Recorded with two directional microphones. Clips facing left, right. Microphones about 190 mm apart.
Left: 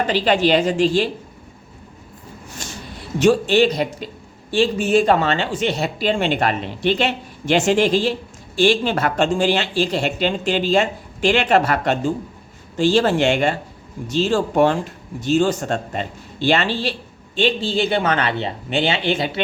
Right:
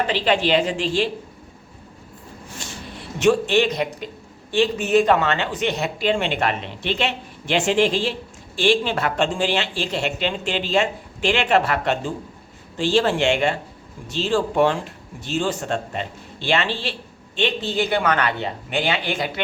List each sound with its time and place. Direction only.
0.1 s speech: 40° left (ahead or behind)
3.2 s speech: 35° left (ahead or behind)